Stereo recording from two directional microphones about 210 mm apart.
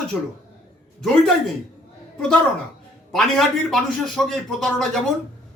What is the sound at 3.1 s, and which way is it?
A man's voice, centre (ahead or behind).